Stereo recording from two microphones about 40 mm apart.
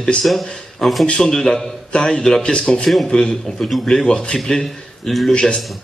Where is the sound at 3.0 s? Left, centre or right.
Centre.